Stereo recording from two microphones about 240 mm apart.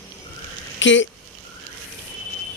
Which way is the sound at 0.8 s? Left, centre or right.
Left.